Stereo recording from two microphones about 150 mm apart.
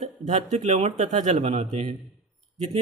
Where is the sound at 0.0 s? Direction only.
50° right (ahead or behind).